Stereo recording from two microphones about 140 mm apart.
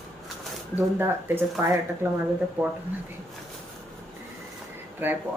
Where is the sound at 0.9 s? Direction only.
15° right (ahead or behind).